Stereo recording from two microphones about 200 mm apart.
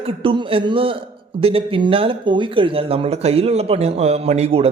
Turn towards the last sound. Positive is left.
turn(degrees=-30)  # may be behind; listen again after turning